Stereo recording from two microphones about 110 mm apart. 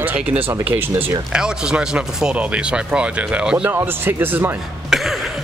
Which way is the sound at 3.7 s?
20° right (ahead or behind).